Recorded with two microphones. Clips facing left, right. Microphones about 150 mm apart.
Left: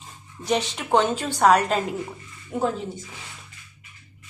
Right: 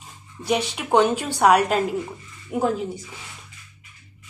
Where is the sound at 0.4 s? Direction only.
10° right (ahead or behind).